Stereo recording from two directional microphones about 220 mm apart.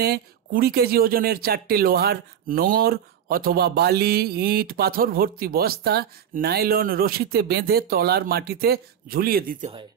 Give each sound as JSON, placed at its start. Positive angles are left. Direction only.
{"t": 0.0, "sound": "speech", "side_deg": -45}